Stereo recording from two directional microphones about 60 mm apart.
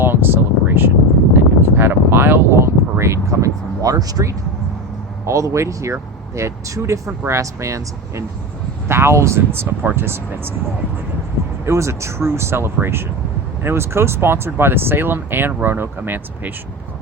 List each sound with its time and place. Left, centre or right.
0.0 s a sound: right
3.0 s vehicle: right
5.2 s speech: right
11.6 s speech: right